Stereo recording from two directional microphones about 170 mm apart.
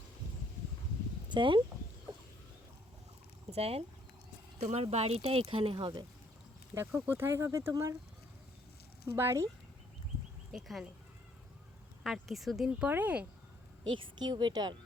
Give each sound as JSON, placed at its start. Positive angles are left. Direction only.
{"t": 1.3, "sound": "speech", "side_deg": -30}
{"t": 3.5, "sound": "speech", "side_deg": -35}
{"t": 6.7, "sound": "speech", "side_deg": -15}
{"t": 9.1, "sound": "speech", "side_deg": -15}
{"t": 10.5, "sound": "speech", "side_deg": 0}
{"t": 12.0, "sound": "speech", "side_deg": 0}
{"t": 14.2, "sound": "speech", "side_deg": -25}